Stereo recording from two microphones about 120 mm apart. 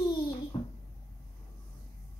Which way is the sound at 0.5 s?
50° left (ahead or behind).